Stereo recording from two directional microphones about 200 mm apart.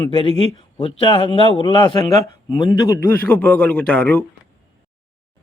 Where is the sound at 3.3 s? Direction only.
5° left (ahead or behind).